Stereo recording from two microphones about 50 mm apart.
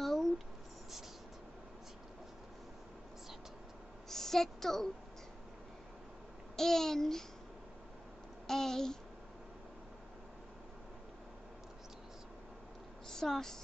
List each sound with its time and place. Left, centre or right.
0.0 s a sound: centre
4.1 s speech: centre
6.5 s babbling: centre
8.5 s babbling: centre
13.1 s speech: centre